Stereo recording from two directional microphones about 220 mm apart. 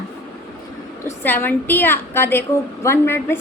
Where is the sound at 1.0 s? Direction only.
10° left (ahead or behind).